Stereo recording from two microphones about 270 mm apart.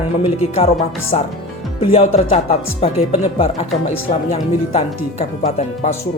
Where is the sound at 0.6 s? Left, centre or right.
Left.